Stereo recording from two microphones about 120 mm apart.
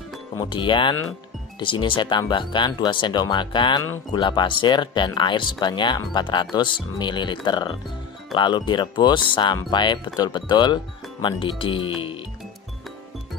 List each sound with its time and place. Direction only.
0.4 s speech: 40° left (ahead or behind)